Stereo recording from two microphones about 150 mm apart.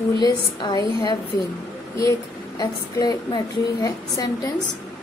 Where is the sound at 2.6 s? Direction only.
25° left (ahead or behind).